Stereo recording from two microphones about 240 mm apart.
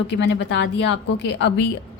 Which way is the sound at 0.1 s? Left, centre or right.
Left.